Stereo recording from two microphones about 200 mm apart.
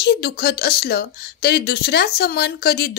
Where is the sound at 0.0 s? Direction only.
55° left (ahead or behind).